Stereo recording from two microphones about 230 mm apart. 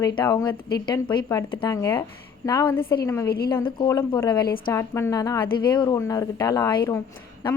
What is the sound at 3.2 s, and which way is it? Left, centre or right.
Speech, left.